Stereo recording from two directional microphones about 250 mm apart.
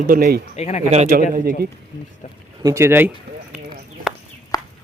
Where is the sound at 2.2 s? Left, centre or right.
Left.